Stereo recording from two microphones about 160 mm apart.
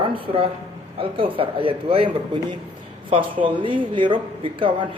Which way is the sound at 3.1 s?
30° right (ahead or behind).